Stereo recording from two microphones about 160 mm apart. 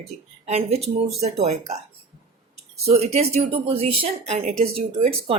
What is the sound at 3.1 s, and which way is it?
Speech, 40° right (ahead or behind).